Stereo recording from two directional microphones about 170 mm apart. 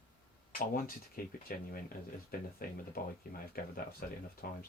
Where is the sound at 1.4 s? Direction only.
55° left (ahead or behind).